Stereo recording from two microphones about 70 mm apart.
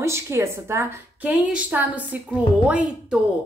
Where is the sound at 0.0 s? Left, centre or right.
Right.